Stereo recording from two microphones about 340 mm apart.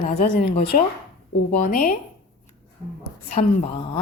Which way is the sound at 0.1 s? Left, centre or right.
Centre.